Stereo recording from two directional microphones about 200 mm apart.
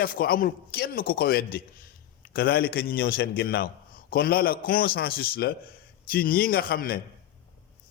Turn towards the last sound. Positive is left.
turn(degrees=45)  # may be behind; listen again after turning